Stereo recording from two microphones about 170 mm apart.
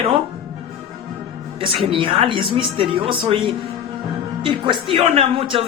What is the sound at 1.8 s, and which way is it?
Speech, 30° right (ahead or behind).